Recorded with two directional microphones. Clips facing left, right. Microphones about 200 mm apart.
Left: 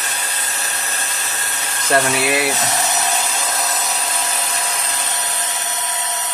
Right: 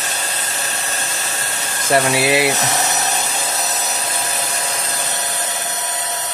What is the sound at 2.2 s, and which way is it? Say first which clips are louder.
Speech: right 3 dB; 25° right (ahead or behind).